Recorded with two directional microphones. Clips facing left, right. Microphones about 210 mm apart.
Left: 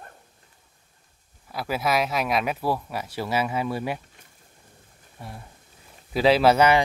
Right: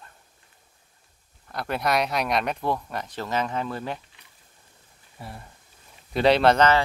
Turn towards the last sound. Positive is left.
turn(degrees=10)  # may be behind; listen again after turning